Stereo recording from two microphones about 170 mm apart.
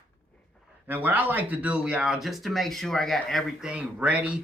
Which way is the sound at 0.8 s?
10° right (ahead or behind).